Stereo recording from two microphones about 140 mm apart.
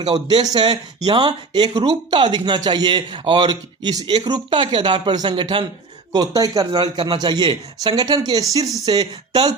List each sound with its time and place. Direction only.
0.1 s speech: 30° right (ahead or behind)
6.1 s a man's voice: 25° right (ahead or behind)